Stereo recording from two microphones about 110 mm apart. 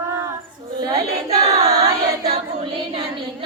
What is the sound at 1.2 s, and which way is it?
Singing, 70° right (ahead or behind).